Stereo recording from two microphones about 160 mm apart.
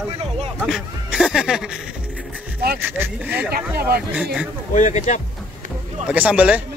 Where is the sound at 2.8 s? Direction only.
10° right (ahead or behind).